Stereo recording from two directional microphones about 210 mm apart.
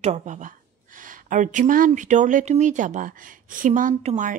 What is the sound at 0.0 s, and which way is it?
Speech, 35° right (ahead or behind).